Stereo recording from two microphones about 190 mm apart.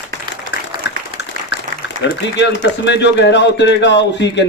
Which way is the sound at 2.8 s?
65° left (ahead or behind).